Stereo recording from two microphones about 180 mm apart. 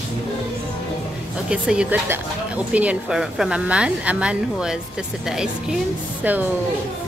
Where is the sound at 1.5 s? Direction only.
5° right (ahead or behind).